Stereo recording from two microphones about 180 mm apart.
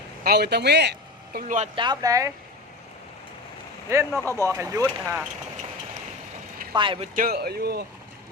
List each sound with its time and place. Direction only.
0.3 s speech: 65° right (ahead or behind); by 1.7 s 45° right (ahead or behind)
1.7 s speech: 25° right (ahead or behind)
4.2 s speech: 15° left (ahead or behind)
4.5 s speech: 15° right (ahead or behind)
6.7 s speech: 25° right (ahead or behind)
7.2 s speech: 60° right (ahead or behind)